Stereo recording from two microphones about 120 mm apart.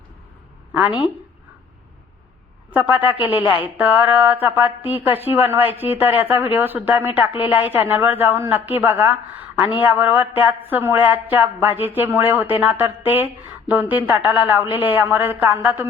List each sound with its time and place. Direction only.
2.7 s speech: 15° right (ahead or behind)